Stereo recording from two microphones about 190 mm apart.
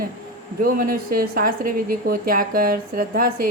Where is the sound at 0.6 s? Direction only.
50° right (ahead or behind).